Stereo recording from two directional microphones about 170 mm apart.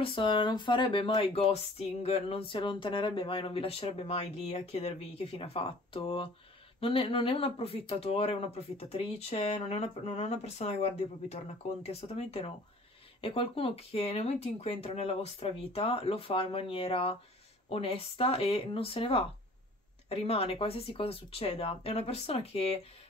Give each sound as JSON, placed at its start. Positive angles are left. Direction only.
{"t": 0.0, "sound": "speech", "side_deg": 30}
{"t": 11.8, "sound": "speech", "side_deg": 35}